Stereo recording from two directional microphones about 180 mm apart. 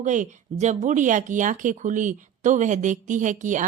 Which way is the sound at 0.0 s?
45° right (ahead or behind).